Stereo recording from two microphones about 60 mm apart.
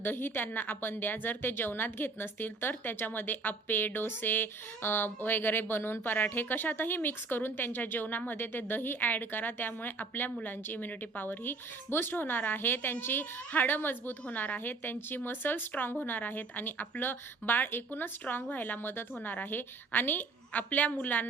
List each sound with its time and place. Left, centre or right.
0.0 s a woman's voice: left